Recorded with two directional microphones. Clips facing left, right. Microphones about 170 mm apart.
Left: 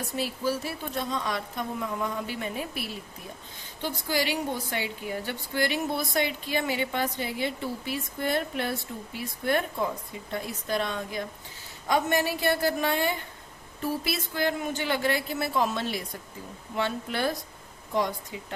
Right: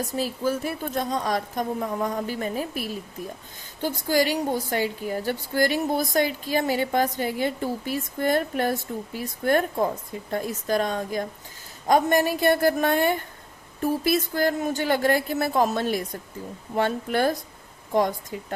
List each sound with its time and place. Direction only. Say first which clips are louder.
0.0 s a woman's voice: right 4 dB; 40° right (ahead or behind)